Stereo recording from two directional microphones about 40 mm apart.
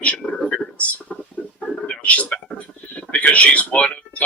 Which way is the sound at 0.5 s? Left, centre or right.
Left.